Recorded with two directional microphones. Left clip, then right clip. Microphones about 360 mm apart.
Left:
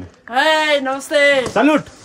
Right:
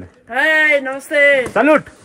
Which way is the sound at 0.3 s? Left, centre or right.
Centre.